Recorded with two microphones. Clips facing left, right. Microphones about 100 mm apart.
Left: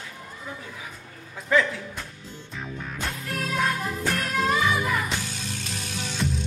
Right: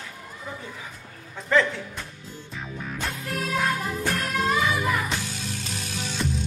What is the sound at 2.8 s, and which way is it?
Music, centre (ahead or behind).